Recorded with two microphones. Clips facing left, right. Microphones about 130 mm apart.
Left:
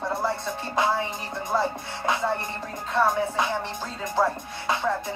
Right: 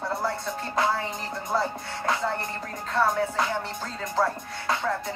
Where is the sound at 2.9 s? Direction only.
15° left (ahead or behind).